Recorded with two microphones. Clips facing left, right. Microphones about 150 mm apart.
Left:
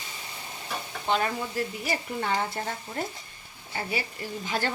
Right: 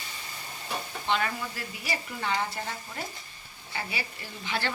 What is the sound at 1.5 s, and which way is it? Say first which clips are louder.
Speech: left 6 dB; 45° left (ahead or behind).